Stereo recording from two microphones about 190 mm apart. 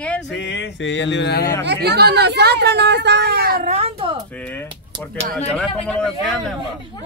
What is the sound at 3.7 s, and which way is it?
Speech, 30° right (ahead or behind).